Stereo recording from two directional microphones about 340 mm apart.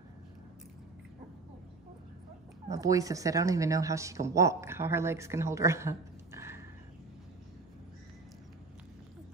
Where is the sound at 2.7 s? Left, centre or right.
Centre.